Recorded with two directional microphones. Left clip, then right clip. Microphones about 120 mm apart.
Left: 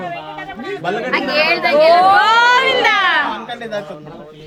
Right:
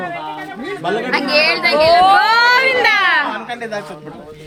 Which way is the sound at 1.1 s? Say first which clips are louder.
Right 1 dB; 20° right (ahead or behind).